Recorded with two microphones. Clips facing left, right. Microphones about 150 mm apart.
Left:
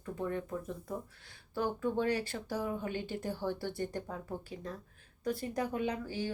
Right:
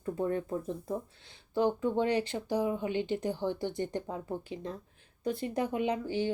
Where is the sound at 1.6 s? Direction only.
20° right (ahead or behind).